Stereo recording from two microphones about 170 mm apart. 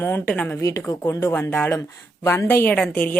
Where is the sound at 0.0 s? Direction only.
10° left (ahead or behind).